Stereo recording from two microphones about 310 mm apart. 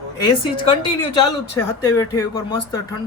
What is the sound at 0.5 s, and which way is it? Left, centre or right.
Speech, centre.